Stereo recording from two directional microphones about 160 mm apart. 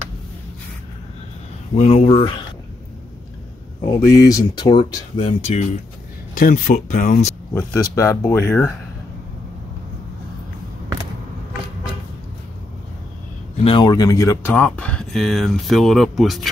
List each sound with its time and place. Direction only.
1.8 s speech: 40° left (ahead or behind)
4.0 s speech: 20° left (ahead or behind); by 5.7 s 40° left (ahead or behind)
6.3 s speech: 55° left (ahead or behind)
7.5 s speech: 20° left (ahead or behind)
13.7 s speech: 25° left (ahead or behind)
14.5 s speech: 10° left (ahead or behind)